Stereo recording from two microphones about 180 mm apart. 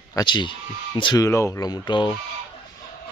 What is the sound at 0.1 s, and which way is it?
Speech, 25° left (ahead or behind).